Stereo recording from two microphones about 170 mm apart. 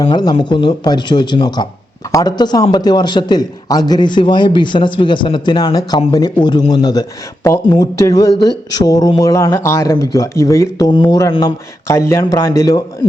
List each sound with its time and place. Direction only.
0.0 s speech: 25° left (ahead or behind)